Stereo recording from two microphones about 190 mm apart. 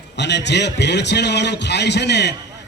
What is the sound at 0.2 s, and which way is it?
A man's voice, 65° left (ahead or behind).